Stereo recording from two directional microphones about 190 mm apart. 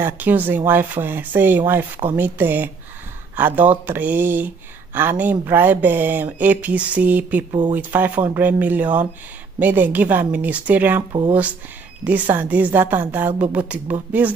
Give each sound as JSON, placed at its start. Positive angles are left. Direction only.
{"t": 0.0, "sound": "speech", "side_deg": -10}
{"t": 11.1, "sound": "speech", "side_deg": -25}
{"t": 12.0, "sound": "speech", "side_deg": -10}